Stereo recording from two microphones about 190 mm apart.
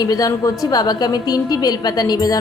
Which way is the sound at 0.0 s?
20° left (ahead or behind).